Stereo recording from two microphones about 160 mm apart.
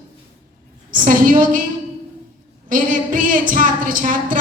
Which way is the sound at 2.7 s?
55° right (ahead or behind).